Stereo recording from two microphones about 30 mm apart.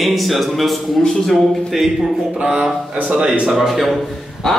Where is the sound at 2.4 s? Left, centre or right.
Right.